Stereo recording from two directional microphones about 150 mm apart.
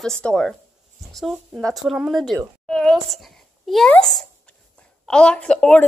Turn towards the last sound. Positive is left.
turn(degrees=5)  # may be behind; listen again after turning